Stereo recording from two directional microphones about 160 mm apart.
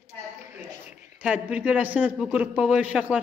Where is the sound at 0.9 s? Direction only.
5° right (ahead or behind).